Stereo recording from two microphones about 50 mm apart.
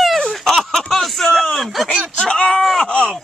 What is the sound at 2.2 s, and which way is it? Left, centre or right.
Dog, left.